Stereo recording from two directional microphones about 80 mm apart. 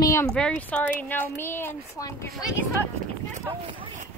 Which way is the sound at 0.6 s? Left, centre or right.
Centre.